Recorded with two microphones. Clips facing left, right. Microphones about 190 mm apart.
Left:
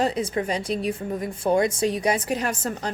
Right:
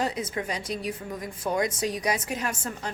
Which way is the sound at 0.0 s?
30° left (ahead or behind).